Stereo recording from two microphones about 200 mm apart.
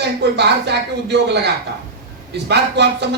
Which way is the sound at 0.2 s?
55° right (ahead or behind).